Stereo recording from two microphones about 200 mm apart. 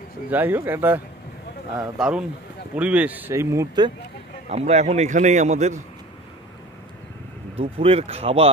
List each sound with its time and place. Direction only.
0.3 s a man's voice: 10° right (ahead or behind)
4.5 s a man's voice: 35° right (ahead or behind)
7.5 s speech: 30° right (ahead or behind)